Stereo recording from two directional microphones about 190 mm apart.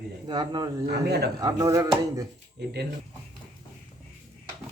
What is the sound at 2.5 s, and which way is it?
Speech, 60° right (ahead or behind).